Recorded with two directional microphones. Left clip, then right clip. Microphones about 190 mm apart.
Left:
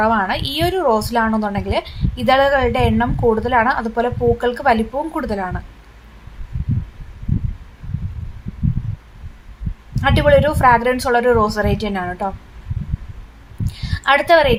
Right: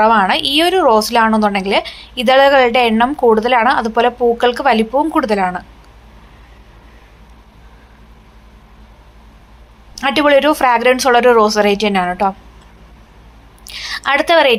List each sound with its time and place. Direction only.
0.0 s a woman's voice: 15° right (ahead or behind)
10.0 s a woman's voice: 15° right (ahead or behind)
13.7 s a woman's voice: 15° right (ahead or behind)